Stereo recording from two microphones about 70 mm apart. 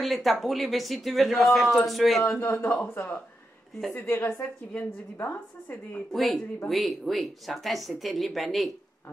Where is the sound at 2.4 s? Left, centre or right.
Left.